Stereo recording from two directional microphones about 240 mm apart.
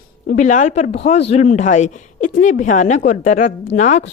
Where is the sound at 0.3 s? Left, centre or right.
Left.